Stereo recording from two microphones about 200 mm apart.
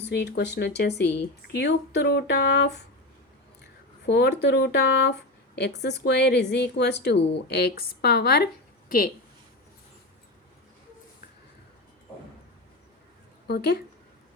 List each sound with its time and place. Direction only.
0.1 s a woman's voice: 55° left (ahead or behind)
4.0 s a woman's voice: 60° left (ahead or behind)
13.5 s speech: 55° left (ahead or behind)